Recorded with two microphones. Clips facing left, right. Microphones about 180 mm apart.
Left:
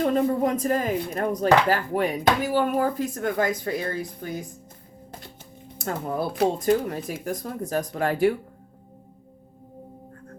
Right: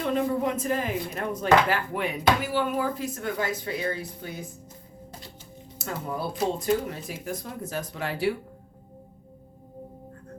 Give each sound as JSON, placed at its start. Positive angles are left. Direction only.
{"t": 0.0, "sound": "speech", "side_deg": 40}
{"t": 5.8, "sound": "speech", "side_deg": 50}
{"t": 6.8, "sound": "speech", "side_deg": 45}